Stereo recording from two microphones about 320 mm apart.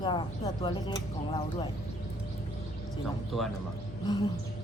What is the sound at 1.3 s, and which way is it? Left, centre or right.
Speech, centre.